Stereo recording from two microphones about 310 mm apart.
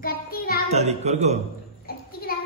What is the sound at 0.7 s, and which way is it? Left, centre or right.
Speech, right.